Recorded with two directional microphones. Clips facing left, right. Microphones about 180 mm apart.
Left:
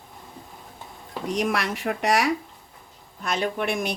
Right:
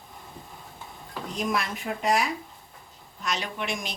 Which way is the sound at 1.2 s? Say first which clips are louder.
Left 4 dB; 75° left (ahead or behind).